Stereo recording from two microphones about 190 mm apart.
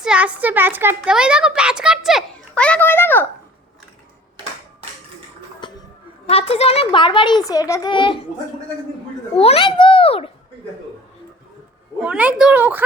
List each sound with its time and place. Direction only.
0.0 s a child's voice: 5° right (ahead or behind); by 3.2 s 10° left (ahead or behind)
5.6 s a sound: 25° left (ahead or behind)
6.2 s a child's voice: 30° left (ahead or behind)
9.3 s a child's voice: 30° left (ahead or behind)
12.0 s speech: 5° right (ahead or behind)